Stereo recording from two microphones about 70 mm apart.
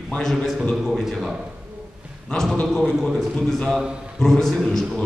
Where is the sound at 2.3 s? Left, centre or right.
Centre.